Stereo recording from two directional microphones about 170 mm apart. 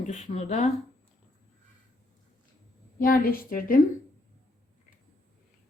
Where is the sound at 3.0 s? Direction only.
60° left (ahead or behind).